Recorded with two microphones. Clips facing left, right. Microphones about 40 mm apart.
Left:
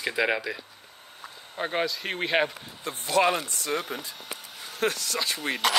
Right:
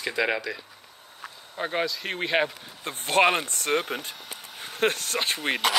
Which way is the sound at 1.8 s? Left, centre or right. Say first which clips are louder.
Even; centre.